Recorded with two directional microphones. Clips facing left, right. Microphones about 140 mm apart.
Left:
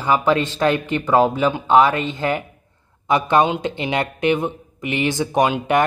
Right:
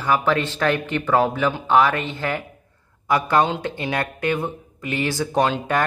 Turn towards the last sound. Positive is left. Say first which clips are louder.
# left 3 dB
turn(degrees=15)  # may be behind; listen again after turning